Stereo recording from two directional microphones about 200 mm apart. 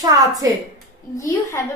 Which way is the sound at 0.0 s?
20° right (ahead or behind).